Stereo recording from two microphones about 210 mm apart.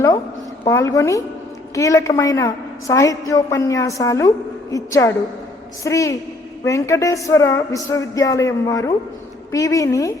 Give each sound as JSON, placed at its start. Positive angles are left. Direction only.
{"t": 0.6, "sound": "a woman's voice", "side_deg": 15}